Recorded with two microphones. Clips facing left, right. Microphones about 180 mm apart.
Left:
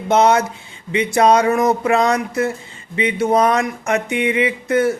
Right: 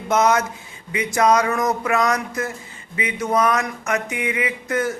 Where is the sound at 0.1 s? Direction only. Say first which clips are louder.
Left 4 dB; 30° left (ahead or behind).